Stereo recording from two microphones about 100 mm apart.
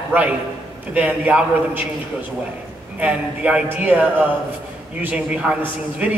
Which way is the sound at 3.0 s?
15° right (ahead or behind).